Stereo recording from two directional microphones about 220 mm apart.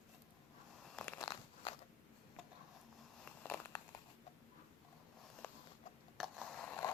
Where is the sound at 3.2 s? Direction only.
10° left (ahead or behind).